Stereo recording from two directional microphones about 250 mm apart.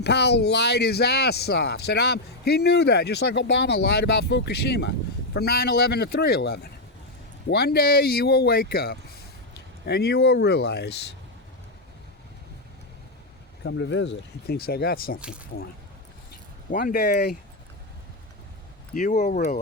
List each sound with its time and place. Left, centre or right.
0.0 s speech: left
13.7 s speech: left
16.7 s speech: left
18.9 s speech: left